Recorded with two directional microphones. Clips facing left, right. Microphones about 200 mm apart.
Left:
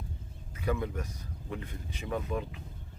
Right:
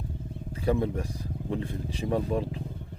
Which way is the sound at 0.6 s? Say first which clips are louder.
Right 6 dB; 30° right (ahead or behind).